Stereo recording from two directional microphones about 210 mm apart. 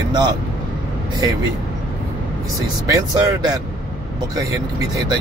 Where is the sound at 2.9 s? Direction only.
15° right (ahead or behind).